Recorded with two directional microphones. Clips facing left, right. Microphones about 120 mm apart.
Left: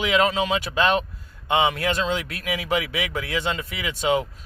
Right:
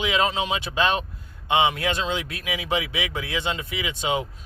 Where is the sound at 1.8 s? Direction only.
20° right (ahead or behind).